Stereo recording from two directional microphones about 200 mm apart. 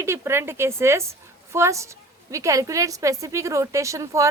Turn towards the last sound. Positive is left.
turn(degrees=-15)  # may be behind; listen again after turning